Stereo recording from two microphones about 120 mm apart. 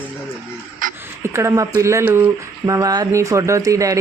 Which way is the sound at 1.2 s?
20° right (ahead or behind).